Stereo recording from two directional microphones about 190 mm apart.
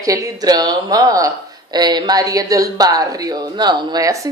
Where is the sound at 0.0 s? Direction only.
15° right (ahead or behind).